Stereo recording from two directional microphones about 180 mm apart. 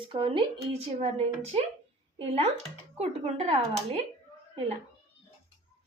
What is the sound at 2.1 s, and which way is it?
A woman's voice, 30° right (ahead or behind).